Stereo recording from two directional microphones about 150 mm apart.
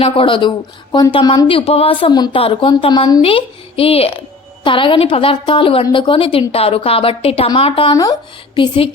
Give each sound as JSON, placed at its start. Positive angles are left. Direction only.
{"t": 0.0, "sound": "a woman's voice", "side_deg": 35}